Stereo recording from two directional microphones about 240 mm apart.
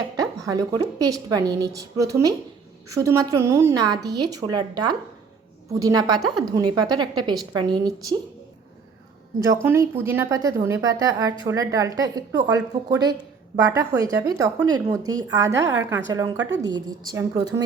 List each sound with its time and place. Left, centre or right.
0.2 s a sound: centre
0.7 s a woman's voice: centre
9.6 s a woman's voice: centre